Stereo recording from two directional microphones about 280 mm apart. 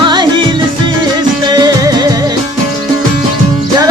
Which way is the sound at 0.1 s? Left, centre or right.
Centre.